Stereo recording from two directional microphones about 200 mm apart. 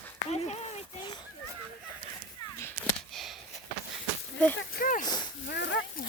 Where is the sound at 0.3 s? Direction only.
30° left (ahead or behind).